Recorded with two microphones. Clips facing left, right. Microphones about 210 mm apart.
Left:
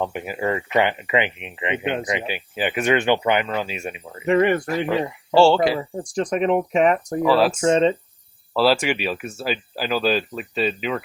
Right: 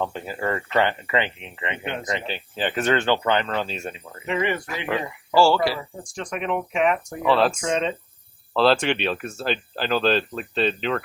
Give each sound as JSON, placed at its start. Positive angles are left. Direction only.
{"t": 0.0, "sound": "speech", "side_deg": 15}
{"t": 4.3, "sound": "speech", "side_deg": 50}
{"t": 5.3, "sound": "speech", "side_deg": 25}
{"t": 6.0, "sound": "speech", "side_deg": 35}
{"t": 7.2, "sound": "speech", "side_deg": 5}
{"t": 7.7, "sound": "speech", "side_deg": 30}
{"t": 8.5, "sound": "speech", "side_deg": 5}